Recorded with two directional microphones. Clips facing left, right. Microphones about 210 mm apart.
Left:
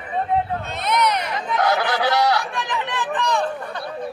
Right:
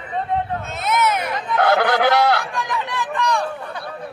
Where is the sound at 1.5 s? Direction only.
60° right (ahead or behind).